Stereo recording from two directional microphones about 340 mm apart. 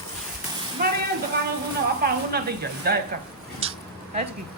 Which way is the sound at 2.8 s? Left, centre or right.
Right.